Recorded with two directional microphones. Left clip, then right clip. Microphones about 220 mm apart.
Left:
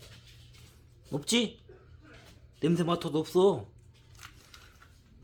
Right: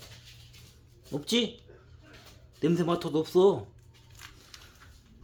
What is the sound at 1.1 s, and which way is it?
Speech, 10° left (ahead or behind).